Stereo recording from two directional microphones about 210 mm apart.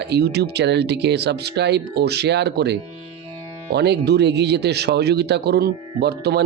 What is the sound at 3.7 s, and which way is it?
Speech, 50° right (ahead or behind).